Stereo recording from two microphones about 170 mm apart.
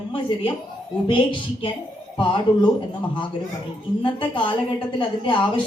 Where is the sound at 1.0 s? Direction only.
30° left (ahead or behind).